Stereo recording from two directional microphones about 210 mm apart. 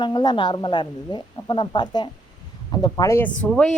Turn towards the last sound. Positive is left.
turn(degrees=5)  # may be behind; listen again after turning